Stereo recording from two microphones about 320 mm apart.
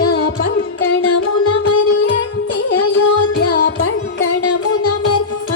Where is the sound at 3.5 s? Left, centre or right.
Left.